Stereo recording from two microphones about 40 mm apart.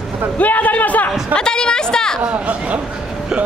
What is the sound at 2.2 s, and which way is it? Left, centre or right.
Speech, right.